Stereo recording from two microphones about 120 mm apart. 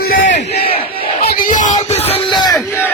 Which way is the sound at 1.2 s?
90° left.